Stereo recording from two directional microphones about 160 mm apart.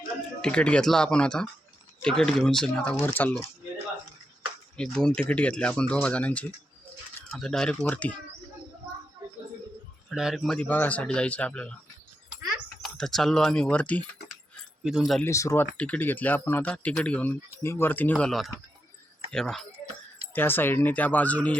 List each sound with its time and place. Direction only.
0.4 s speech: 5° left (ahead or behind)
4.8 s speech: 5° left (ahead or behind)
10.1 s speech: centre (ahead or behind)
12.8 s speech: centre (ahead or behind)
15.2 s speech: 20° left (ahead or behind)
15.6 s speech: 10° left (ahead or behind)
20.3 s speech: 15° left (ahead or behind)